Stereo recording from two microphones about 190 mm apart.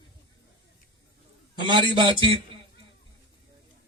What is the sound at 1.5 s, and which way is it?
Speech, 25° right (ahead or behind).